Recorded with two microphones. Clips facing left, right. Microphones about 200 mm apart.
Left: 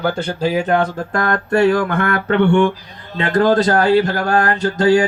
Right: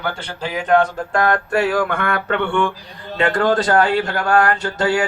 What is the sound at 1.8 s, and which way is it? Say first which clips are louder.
Speech: left 2 dB; 45° left (ahead or behind).